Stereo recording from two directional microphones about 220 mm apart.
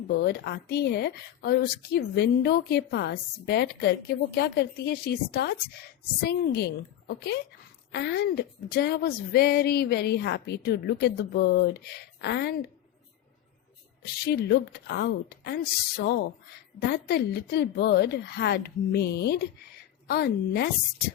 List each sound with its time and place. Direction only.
0.1 s speech: 50° left (ahead or behind)
14.3 s speech: 50° left (ahead or behind)